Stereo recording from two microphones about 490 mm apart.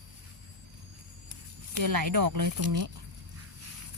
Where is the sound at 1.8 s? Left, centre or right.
Right.